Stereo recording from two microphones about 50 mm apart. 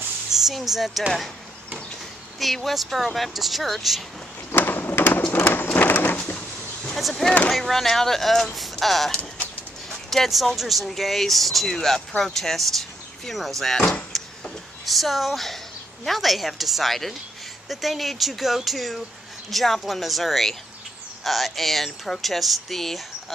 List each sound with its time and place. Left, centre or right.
0.3 s speech: centre
2.4 s speech: centre
4.5 s a sound: left
7.0 s speech: centre
14.9 s speech: centre